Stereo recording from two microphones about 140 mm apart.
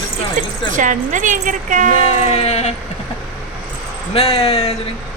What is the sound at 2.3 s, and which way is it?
Speech, 50° left (ahead or behind).